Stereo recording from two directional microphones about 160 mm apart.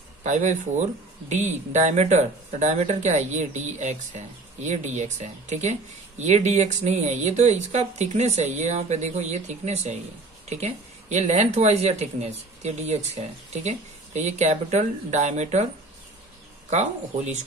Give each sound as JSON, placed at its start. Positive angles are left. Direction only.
{"t": 0.2, "sound": "speech", "side_deg": -45}